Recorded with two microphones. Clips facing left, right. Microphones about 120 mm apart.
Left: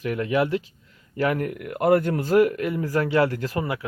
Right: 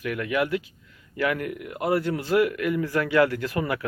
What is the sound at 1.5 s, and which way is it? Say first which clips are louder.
Speech: left 5 dB; 50° left (ahead or behind).